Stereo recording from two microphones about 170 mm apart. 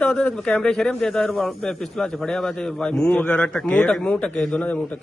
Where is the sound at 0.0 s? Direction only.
5° left (ahead or behind).